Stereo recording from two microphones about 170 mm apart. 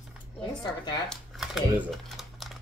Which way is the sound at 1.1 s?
5° right (ahead or behind).